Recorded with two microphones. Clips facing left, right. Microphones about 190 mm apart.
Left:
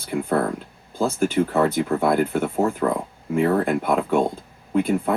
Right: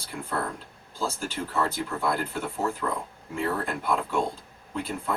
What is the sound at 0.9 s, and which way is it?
Speech, 55° left (ahead or behind).